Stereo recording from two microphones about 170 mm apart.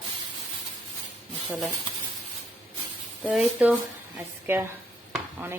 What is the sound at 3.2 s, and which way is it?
Speech, 5° right (ahead or behind).